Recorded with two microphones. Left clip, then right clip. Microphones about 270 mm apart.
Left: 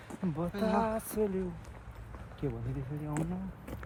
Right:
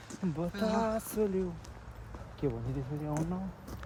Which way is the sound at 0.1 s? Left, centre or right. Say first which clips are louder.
Even; left.